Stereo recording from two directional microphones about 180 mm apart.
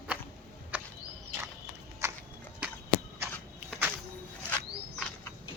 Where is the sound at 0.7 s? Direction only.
10° right (ahead or behind).